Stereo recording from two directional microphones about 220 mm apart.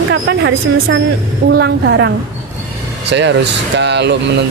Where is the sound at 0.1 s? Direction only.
55° right (ahead or behind).